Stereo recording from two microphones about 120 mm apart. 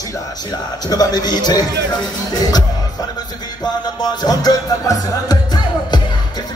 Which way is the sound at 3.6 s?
35° left (ahead or behind).